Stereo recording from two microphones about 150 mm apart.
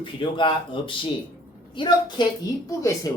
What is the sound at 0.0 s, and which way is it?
Speech, 35° left (ahead or behind).